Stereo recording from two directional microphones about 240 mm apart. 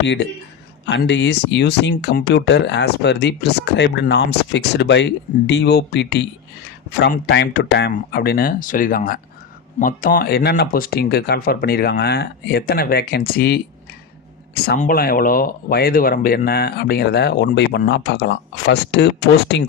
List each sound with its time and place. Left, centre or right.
0.0 s speech: left